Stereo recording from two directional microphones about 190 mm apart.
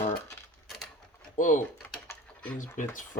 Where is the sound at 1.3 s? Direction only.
45° left (ahead or behind).